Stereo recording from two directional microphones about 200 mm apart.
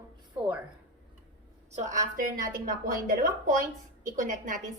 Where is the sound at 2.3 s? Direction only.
40° right (ahead or behind).